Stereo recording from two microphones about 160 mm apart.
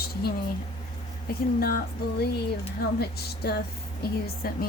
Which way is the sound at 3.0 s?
85° left.